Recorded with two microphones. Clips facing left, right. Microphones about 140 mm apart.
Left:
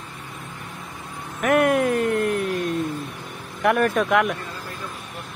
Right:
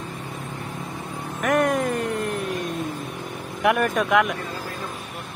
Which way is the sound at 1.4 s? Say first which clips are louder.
Left 3 dB; 5° left (ahead or behind).